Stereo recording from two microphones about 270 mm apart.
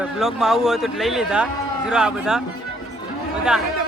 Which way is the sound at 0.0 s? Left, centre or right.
Centre.